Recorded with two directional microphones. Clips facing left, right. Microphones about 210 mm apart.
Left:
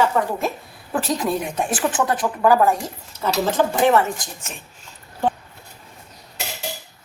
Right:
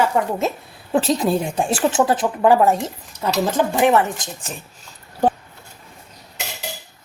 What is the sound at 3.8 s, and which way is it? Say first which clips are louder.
Speech: right 1 dB; 15° right (ahead or behind).